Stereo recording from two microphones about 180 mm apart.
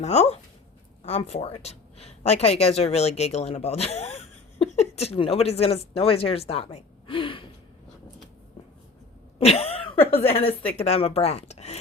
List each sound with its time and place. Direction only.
0.0 s speech: 35° left (ahead or behind)
9.4 s cough: 35° left (ahead or behind)
10.2 s speech: 30° left (ahead or behind)